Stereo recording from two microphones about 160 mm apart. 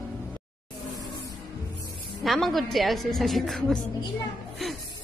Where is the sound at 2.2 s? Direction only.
Centre (ahead or behind).